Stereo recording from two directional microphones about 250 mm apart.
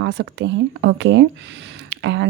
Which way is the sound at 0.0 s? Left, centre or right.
Right.